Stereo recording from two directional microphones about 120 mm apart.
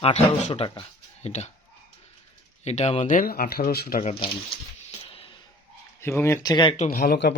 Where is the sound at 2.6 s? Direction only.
60° left (ahead or behind).